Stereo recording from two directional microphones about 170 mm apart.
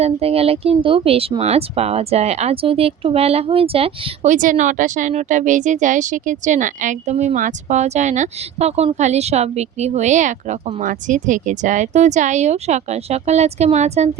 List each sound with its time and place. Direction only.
0.0 s speech: 35° right (ahead or behind)